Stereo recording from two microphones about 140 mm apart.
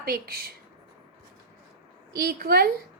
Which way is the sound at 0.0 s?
90° right.